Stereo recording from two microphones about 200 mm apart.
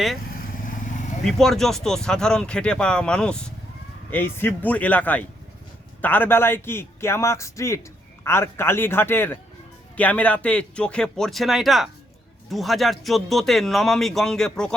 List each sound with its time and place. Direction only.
0.3 s vehicle: 45° left (ahead or behind)
1.2 s a man's voice: centre (ahead or behind)